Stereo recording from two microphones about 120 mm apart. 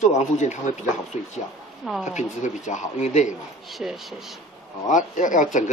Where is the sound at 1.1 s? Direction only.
70° left (ahead or behind).